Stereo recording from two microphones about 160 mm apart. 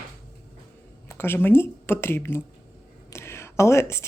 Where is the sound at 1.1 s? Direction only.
15° left (ahead or behind).